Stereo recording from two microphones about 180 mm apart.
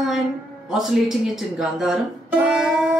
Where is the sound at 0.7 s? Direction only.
Centre (ahead or behind).